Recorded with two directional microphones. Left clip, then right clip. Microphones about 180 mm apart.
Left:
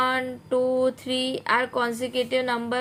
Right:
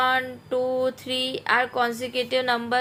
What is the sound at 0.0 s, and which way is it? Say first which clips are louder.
A woman's voice: right 2 dB; 25° left (ahead or behind).